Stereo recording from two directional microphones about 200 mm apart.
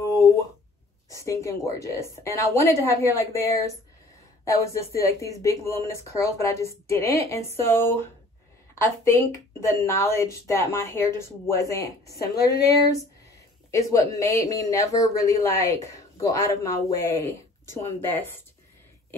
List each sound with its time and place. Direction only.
0.0 s a sound: 15° left (ahead or behind)
1.1 s speech: 15° left (ahead or behind)
12.1 s a woman's voice: 55° left (ahead or behind)
13.7 s speech: 15° left (ahead or behind)